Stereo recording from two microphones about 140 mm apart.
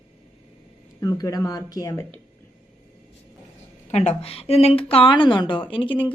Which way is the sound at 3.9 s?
50° left (ahead or behind).